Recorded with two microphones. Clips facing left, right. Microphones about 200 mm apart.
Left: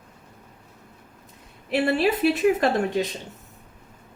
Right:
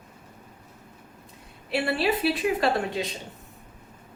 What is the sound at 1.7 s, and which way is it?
A woman's voice, 45° left (ahead or behind).